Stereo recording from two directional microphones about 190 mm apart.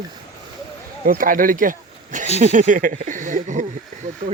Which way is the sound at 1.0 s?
45° right (ahead or behind).